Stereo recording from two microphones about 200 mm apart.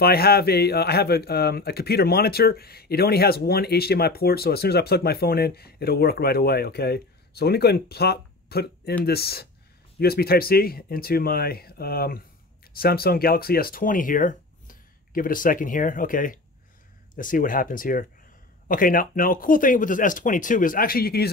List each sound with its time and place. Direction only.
0.0 s speech: 50° left (ahead or behind)